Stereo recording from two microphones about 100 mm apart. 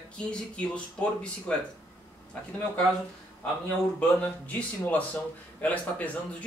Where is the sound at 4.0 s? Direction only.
15° left (ahead or behind).